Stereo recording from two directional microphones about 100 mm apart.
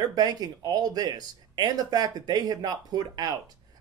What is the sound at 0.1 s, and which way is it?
Speech, 40° right (ahead or behind).